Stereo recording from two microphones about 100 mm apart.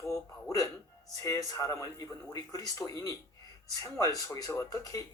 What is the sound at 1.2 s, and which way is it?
Speech, 30° left (ahead or behind).